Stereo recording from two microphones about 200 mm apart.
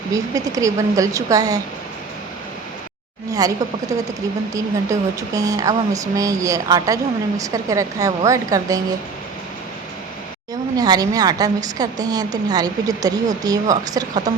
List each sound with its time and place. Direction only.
0.1 s speech: 15° right (ahead or behind)
3.3 s speech: 15° right (ahead or behind)
10.8 s a woman's voice: 20° right (ahead or behind)